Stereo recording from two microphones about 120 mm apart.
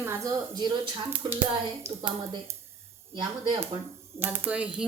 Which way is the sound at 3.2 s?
40° right (ahead or behind).